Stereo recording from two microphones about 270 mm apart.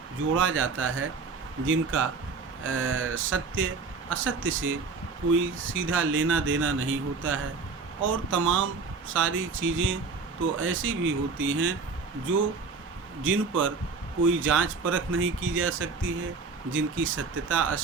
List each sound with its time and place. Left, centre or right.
0.3 s speech: right
13.2 s speech: right